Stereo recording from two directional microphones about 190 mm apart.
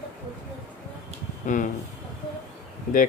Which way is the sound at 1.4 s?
40° left (ahead or behind).